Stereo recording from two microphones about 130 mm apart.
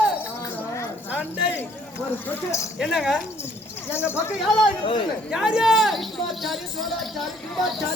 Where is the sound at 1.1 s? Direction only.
10° right (ahead or behind).